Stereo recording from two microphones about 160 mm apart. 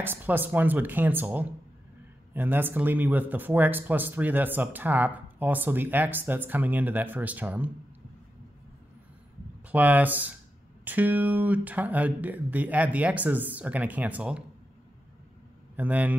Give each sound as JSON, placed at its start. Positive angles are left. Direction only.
{"t": 0.0, "sound": "speech", "side_deg": -10}
{"t": 9.7, "sound": "speech", "side_deg": -10}
{"t": 15.7, "sound": "speech", "side_deg": -10}